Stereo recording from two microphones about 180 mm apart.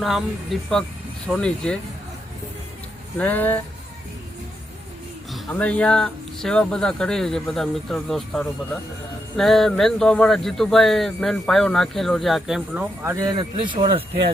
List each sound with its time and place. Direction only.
0.0 s a man's voice: centre (ahead or behind)
3.2 s speech: 10° left (ahead or behind)
5.3 s a man's voice: 5° left (ahead or behind); by 14.0 s 30° right (ahead or behind)